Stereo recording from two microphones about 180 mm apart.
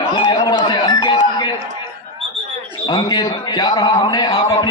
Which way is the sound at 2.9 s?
20° left (ahead or behind).